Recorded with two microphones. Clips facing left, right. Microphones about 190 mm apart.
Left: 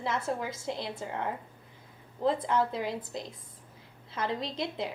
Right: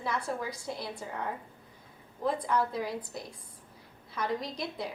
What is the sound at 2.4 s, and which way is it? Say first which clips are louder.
A woman's voice: left 1 dB; 25° left (ahead or behind).